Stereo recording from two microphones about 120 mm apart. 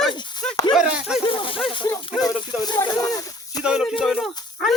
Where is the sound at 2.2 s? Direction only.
35° left (ahead or behind).